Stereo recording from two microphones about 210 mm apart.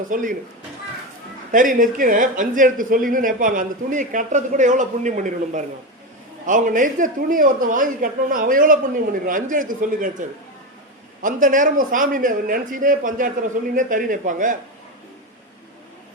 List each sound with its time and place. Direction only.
0.1 s speech: 40° right (ahead or behind)
1.5 s speech: 40° right (ahead or behind)